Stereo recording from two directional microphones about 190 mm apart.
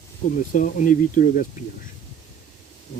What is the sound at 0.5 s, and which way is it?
Speech, 45° left (ahead or behind).